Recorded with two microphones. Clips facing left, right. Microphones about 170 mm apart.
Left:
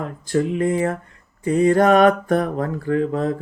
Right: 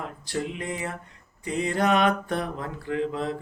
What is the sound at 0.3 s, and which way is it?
Mantra, 45° left (ahead or behind).